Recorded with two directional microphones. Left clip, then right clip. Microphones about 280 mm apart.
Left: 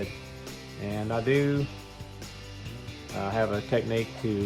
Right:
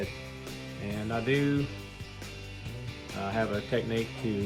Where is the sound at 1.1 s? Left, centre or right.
Left.